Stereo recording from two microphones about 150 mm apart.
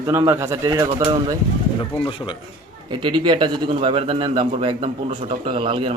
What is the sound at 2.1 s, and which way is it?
Speech, 35° left (ahead or behind).